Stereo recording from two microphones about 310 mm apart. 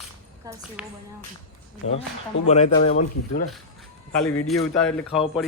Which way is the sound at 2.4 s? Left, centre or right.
Left.